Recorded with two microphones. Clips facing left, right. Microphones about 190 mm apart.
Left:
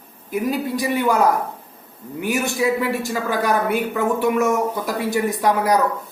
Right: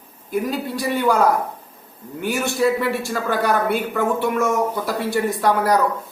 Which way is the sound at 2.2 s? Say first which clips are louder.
Right 1 dB; 10° left (ahead or behind).